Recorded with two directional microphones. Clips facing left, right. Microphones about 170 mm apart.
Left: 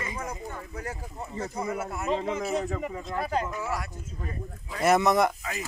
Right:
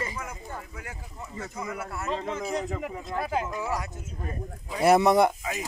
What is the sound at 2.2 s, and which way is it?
Speech, 5° left (ahead or behind).